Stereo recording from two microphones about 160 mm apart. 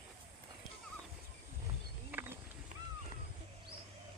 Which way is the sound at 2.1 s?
10° right (ahead or behind).